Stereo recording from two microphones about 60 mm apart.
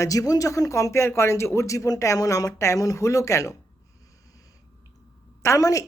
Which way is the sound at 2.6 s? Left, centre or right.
Left.